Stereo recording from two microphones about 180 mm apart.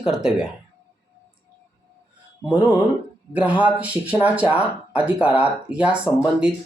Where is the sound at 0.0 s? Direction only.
5° right (ahead or behind).